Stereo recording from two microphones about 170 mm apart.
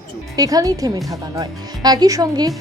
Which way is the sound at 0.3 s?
20° right (ahead or behind).